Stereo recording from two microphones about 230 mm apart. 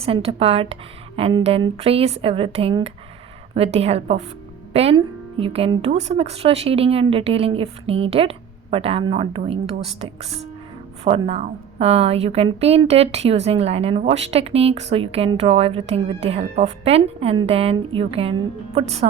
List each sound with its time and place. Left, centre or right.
0.0 s a woman's voice: right